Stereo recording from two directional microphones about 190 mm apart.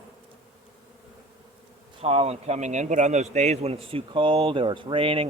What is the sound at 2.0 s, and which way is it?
Speech, 35° right (ahead or behind).